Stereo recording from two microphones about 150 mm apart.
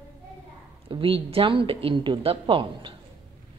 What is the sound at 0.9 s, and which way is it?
Speech, 35° right (ahead or behind).